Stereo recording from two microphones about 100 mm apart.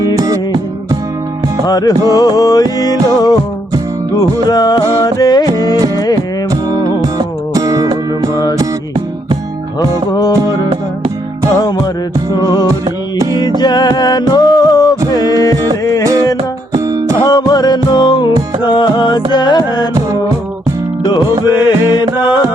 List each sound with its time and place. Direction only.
1.6 s music: 40° left (ahead or behind)
7.0 s music: 40° right (ahead or behind)
10.1 s music: 40° left (ahead or behind)
12.4 s music: 40° left (ahead or behind)
17.2 s music: 40° left (ahead or behind)
21.0 s music: 50° left (ahead or behind)